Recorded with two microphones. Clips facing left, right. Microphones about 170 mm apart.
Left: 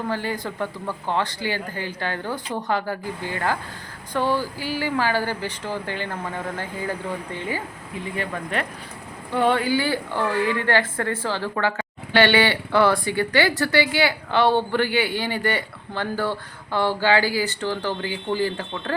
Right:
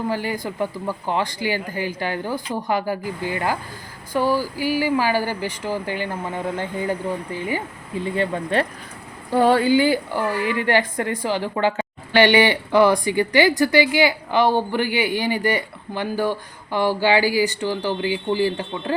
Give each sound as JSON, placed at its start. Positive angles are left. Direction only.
{"t": 0.1, "sound": "a woman's voice", "side_deg": -10}
{"t": 8.0, "sound": "speech", "side_deg": -30}
{"t": 9.6, "sound": "a woman's voice", "side_deg": -15}